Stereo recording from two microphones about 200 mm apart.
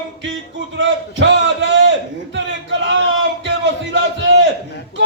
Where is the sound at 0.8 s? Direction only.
65° right (ahead or behind).